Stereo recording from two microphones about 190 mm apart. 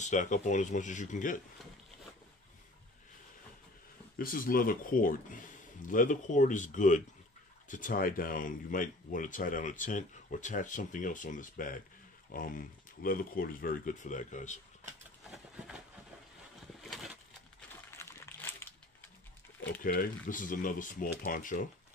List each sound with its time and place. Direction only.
0.0 s speech: 40° left (ahead or behind)
4.2 s speech: 50° left (ahead or behind)
15.2 s a sound: centre (ahead or behind)
17.9 s crumpling: 10° left (ahead or behind)
19.8 s speech: 45° left (ahead or behind)